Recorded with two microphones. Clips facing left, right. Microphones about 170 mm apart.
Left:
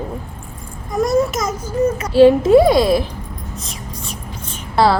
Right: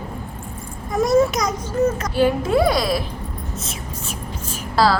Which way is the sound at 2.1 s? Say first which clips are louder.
Left 13 dB; 25° left (ahead or behind).